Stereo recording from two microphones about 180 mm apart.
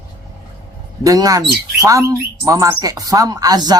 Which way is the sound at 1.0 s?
20° right (ahead or behind).